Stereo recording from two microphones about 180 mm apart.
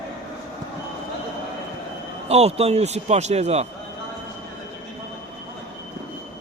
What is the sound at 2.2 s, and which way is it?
A man's voice, 35° right (ahead or behind).